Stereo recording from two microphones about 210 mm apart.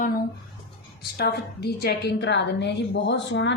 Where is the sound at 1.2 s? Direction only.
50° left (ahead or behind).